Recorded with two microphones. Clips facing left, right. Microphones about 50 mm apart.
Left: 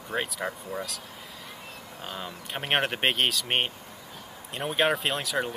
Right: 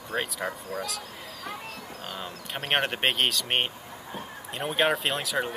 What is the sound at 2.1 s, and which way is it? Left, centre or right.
Speech, centre.